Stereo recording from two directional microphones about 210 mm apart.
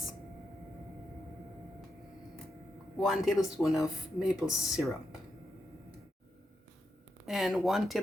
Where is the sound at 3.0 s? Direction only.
Centre (ahead or behind).